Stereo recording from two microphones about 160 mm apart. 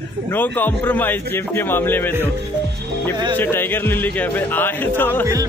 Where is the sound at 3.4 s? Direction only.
15° left (ahead or behind).